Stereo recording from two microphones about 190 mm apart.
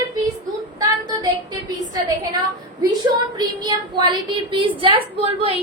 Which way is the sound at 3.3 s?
25° right (ahead or behind).